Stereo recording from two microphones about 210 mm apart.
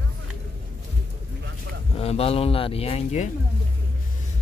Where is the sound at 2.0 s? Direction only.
30° left (ahead or behind).